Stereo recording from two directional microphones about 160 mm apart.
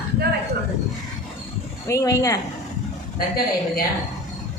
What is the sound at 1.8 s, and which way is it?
Speech, 20° left (ahead or behind).